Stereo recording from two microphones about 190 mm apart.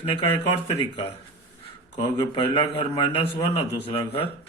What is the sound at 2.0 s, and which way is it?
A man's voice, 25° left (ahead or behind).